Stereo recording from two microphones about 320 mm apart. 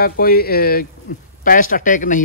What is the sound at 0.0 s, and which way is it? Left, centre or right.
A man's voice, left.